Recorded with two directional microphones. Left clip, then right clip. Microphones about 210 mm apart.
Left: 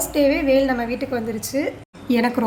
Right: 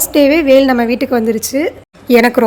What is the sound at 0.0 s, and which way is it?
A woman's voice, 45° right (ahead or behind).